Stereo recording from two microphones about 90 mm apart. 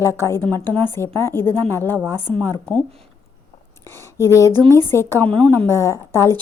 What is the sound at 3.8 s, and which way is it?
Speech, 30° left (ahead or behind).